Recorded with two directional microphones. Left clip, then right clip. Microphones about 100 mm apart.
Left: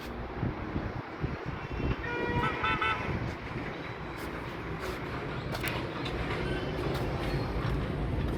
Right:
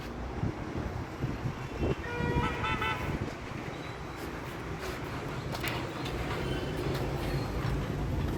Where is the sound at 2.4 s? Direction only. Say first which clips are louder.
Left 4 dB; 20° right (ahead or behind).